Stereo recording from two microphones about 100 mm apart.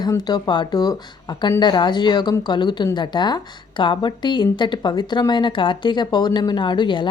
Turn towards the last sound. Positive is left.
turn(degrees=50)  # may be behind; listen again after turning